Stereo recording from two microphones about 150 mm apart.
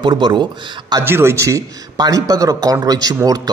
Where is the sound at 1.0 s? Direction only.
15° right (ahead or behind).